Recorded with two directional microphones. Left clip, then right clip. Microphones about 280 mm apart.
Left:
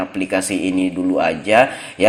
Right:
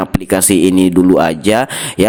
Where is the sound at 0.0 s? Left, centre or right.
Right.